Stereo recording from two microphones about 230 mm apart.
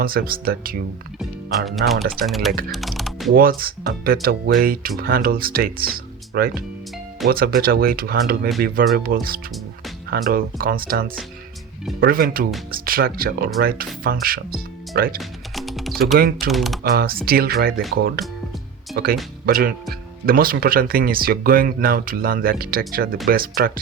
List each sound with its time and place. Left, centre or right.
0.0 s speech: right
1.2 s speech: centre
2.0 s speech: right
2.2 s speech: centre
3.3 s speech: right
15.2 s music: centre
16.1 s speech: right
16.5 s speech: centre
16.8 s speech: right